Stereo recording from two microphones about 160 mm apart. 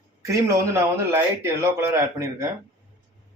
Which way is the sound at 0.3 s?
20° right (ahead or behind).